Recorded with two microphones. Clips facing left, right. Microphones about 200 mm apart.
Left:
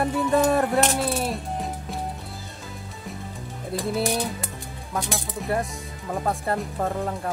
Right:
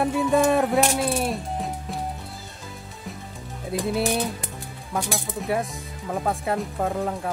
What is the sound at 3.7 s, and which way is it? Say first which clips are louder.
Music: right 1 dB; centre (ahead or behind).